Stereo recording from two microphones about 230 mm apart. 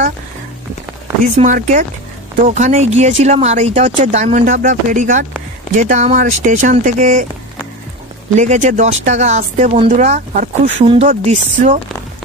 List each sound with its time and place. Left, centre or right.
1.2 s speech: right
8.4 s speech: right